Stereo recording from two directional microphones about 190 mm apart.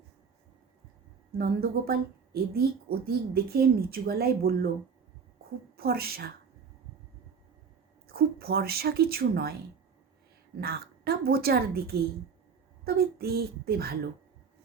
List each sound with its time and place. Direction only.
1.4 s speech: 55° right (ahead or behind)
5.7 s speech: 55° right (ahead or behind)
8.0 s speech: 55° right (ahead or behind)
10.6 s speech: 55° right (ahead or behind)